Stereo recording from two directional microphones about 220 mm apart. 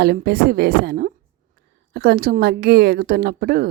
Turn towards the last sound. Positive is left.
turn(degrees=-45)  # may be behind; listen again after turning